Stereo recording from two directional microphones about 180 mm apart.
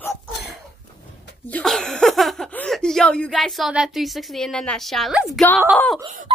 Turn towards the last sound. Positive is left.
turn(degrees=5)  # may be behind; listen again after turning